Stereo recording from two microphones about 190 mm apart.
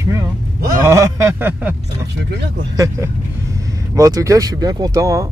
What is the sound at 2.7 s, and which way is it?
Speech, 15° right (ahead or behind).